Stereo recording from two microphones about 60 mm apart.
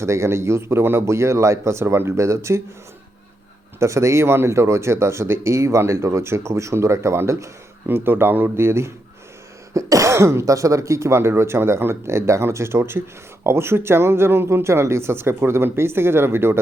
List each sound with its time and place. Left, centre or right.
0.0 s speech: right
3.8 s speech: right
7.9 s speech: right
9.7 s speech: right